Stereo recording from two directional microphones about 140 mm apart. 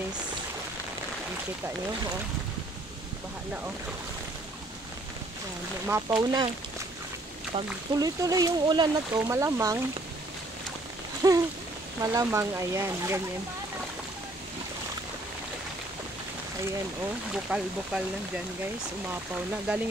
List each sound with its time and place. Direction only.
5.9 s speech: 20° right (ahead or behind)
6.1 s speech: 30° right (ahead or behind)
7.5 s speech: 40° right (ahead or behind)
7.9 s speech: 25° right (ahead or behind)
11.2 s speech: 30° right (ahead or behind)
17.5 s speech: 5° right (ahead or behind)